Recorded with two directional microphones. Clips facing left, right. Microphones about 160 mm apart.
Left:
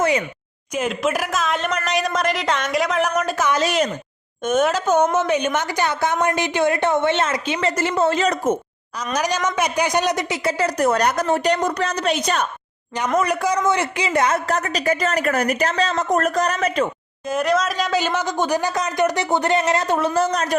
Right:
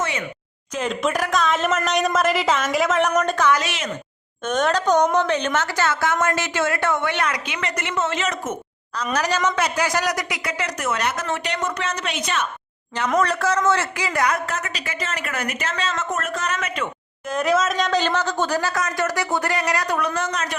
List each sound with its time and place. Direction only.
0.7 s speech: 5° left (ahead or behind)
3.6 s a woman's voice: 40° left (ahead or behind)
4.4 s a woman's voice: 5° left (ahead or behind); by 8.5 s 35° left (ahead or behind)
9.1 s a woman's voice: 15° left (ahead or behind); by 12.5 s 35° left (ahead or behind)
13.1 s a woman's voice: 10° left (ahead or behind); by 16.9 s 35° left (ahead or behind)
17.2 s speech: centre (ahead or behind); by 20.6 s 35° left (ahead or behind)